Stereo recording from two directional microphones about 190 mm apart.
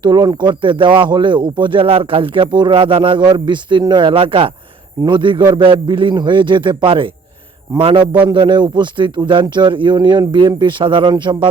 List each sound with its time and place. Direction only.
0.0 s speech: 25° right (ahead or behind)